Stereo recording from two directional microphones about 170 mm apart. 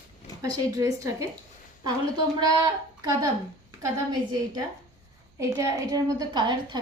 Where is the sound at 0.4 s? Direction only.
20° right (ahead or behind).